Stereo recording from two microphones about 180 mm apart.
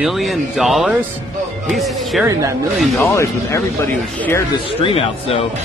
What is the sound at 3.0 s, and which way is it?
Speech, 15° left (ahead or behind).